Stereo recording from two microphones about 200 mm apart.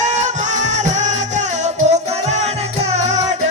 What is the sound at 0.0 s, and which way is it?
Music, 35° right (ahead or behind).